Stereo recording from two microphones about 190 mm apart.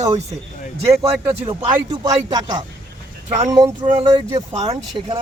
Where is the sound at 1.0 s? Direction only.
30° right (ahead or behind).